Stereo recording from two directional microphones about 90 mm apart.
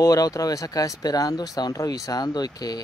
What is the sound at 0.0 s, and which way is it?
Speech, 40° left (ahead or behind).